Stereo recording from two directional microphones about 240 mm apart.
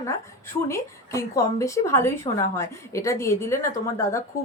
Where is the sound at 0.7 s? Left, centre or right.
Centre.